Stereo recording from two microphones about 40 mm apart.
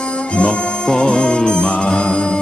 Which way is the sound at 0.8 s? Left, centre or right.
Left.